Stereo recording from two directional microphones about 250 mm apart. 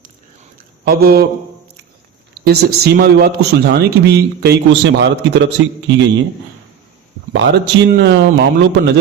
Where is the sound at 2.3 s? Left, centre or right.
Right.